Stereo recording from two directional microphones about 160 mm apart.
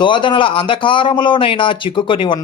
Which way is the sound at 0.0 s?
30° left (ahead or behind).